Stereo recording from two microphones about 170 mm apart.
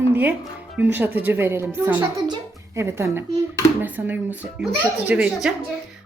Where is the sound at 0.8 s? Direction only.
10° right (ahead or behind).